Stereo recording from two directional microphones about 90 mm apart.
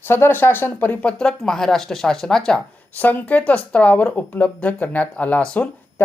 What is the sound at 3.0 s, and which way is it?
Speech, 20° left (ahead or behind).